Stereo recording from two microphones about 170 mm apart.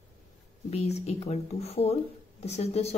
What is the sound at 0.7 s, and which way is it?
Speech, 40° left (ahead or behind).